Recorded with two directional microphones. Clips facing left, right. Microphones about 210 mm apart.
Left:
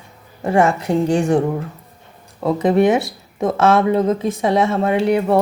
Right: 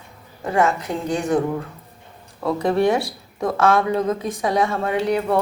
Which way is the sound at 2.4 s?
20° left (ahead or behind).